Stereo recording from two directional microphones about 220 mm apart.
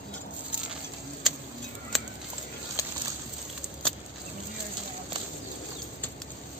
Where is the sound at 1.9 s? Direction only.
Centre (ahead or behind).